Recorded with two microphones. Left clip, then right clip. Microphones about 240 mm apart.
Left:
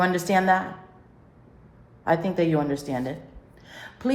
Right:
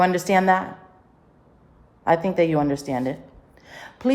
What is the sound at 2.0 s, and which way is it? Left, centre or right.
A woman's voice, right.